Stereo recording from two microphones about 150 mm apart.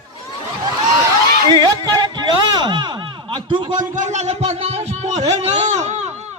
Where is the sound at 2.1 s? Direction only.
30° right (ahead or behind).